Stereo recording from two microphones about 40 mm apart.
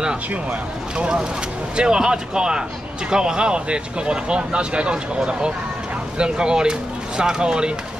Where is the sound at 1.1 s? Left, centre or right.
Centre.